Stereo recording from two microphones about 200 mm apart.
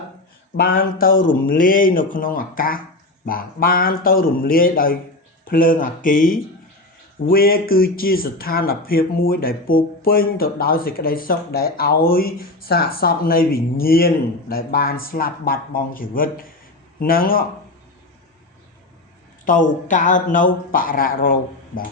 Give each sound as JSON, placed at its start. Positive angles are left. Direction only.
{"t": 0.8, "sound": "speech", "side_deg": 45}
{"t": 19.5, "sound": "speech", "side_deg": 40}